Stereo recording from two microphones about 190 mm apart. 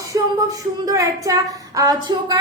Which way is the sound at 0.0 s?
15° right (ahead or behind).